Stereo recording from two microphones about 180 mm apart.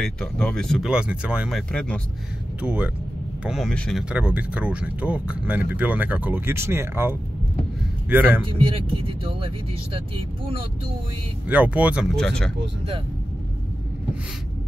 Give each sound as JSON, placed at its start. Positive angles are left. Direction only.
{"t": 0.0, "sound": "speech", "side_deg": 5}
{"t": 1.7, "sound": "speech", "side_deg": 5}
{"t": 2.6, "sound": "speech", "side_deg": -10}
{"t": 4.1, "sound": "speech", "side_deg": -5}
{"t": 8.5, "sound": "speech", "side_deg": -30}
{"t": 11.4, "sound": "speech", "side_deg": -10}